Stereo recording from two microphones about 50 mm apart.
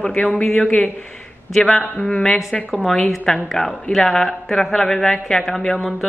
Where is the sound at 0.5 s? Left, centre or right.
Left.